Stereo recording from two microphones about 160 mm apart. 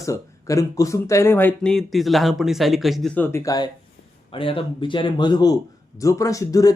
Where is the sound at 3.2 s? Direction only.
15° left (ahead or behind).